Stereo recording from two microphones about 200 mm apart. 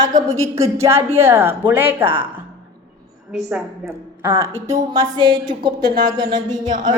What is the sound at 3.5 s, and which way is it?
A woman's voice, 15° right (ahead or behind).